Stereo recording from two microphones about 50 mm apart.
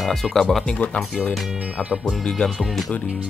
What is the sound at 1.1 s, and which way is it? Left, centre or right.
Speech, centre.